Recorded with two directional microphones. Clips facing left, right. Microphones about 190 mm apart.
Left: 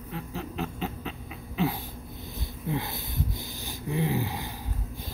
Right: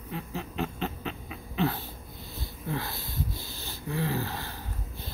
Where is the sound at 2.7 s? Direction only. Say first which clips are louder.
Left 2 dB; 20° left (ahead or behind).